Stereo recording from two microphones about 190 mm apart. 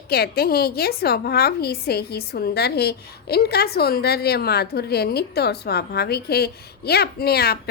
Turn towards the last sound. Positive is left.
turn(degrees=55)  # may be behind; listen again after turning